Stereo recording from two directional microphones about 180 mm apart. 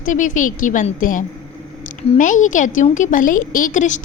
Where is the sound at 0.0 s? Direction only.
45° left (ahead or behind).